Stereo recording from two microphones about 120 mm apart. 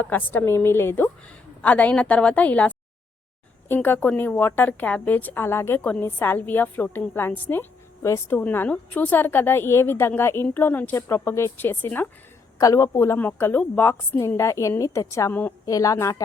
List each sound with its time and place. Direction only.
0.0 s a woman's voice: 15° left (ahead or behind)
3.8 s a woman's voice: 15° left (ahead or behind)
12.5 s a woman's voice: 30° left (ahead or behind)
13.1 s a woman's voice: 15° left (ahead or behind)
15.6 s a woman's voice: 30° left (ahead or behind)